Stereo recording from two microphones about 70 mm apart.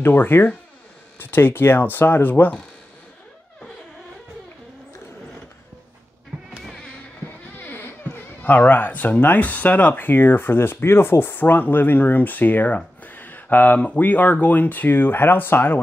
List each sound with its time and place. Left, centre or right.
0.0 s speech: left
6.6 s insect: centre
7.5 s speech: left